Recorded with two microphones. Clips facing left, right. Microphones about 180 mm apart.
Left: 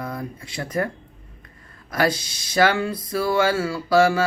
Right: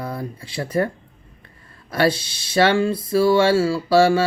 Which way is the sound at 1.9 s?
30° right (ahead or behind).